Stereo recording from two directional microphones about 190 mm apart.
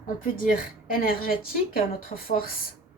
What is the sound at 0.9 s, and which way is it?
Speech, 50° left (ahead or behind).